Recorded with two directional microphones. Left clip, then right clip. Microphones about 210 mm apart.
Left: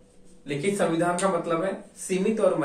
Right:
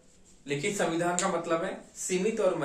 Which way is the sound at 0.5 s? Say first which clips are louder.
Left 4 dB; 15° right (ahead or behind).